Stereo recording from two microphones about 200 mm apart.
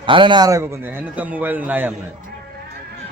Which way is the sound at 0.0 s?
25° right (ahead or behind).